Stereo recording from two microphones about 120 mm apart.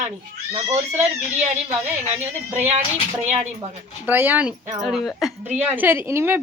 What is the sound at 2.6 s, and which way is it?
Speech, 75° right (ahead or behind).